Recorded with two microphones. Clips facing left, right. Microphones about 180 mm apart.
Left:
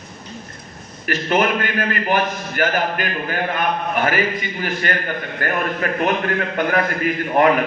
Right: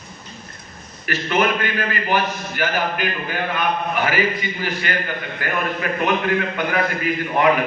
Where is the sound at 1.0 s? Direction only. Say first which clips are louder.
Left 1 dB; 45° left (ahead or behind).